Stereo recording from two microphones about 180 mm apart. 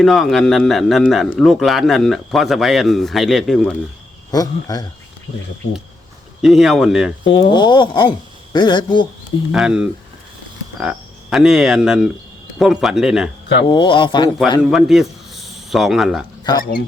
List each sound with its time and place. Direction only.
0.0 s a man's voice: centre (ahead or behind)
4.3 s speech: 20° left (ahead or behind)
6.4 s a man's voice: centre (ahead or behind)
7.5 s speech: 25° left (ahead or behind)
9.5 s a man's voice: 5° right (ahead or behind)
10.8 s frog: 5° right (ahead or behind)
12.5 s a man's voice: centre (ahead or behind)
13.7 s speech: 25° left (ahead or behind)
14.6 s a man's voice: 5° right (ahead or behind)
16.4 s speech: 25° left (ahead or behind)